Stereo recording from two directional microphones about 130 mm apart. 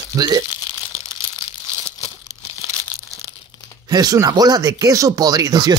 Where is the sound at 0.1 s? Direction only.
30° right (ahead or behind).